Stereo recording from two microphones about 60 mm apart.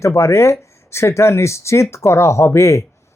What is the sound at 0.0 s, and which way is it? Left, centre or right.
Speech, left.